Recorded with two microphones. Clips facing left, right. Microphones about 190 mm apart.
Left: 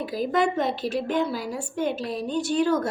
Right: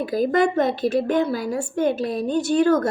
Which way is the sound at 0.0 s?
50° right (ahead or behind).